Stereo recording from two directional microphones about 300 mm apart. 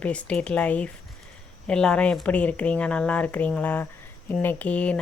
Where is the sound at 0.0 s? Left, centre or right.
Centre.